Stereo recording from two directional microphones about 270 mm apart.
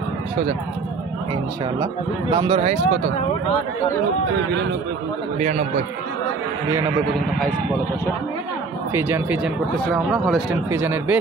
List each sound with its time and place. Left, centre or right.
2.3 s speech: centre
5.4 s speech: right
8.9 s speech: centre